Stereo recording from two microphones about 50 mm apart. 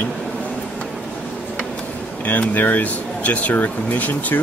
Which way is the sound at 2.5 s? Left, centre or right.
Left.